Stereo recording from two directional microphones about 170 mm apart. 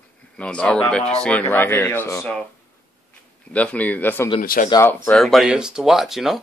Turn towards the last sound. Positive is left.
turn(degrees=0)  # may be behind; listen again after turning